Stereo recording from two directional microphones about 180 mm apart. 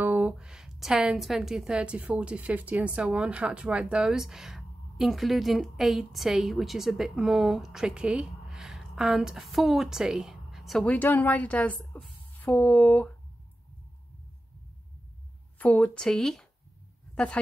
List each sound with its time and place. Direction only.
0.0 s a woman's voice: 10° right (ahead or behind); by 13.1 s 10° left (ahead or behind)
15.6 s a woman's voice: 10° left (ahead or behind)